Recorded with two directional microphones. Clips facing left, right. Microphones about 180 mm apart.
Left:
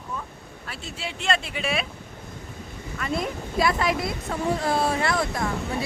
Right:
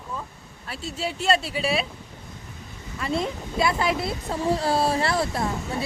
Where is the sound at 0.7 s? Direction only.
40° right (ahead or behind).